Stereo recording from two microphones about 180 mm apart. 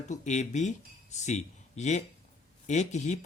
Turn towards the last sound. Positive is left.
turn(degrees=40)  # may be behind; listen again after turning